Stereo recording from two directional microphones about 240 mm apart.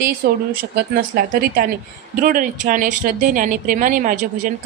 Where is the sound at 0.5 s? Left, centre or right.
Right.